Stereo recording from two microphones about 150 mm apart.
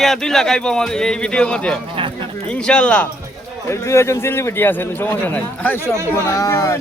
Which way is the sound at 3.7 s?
20° left (ahead or behind).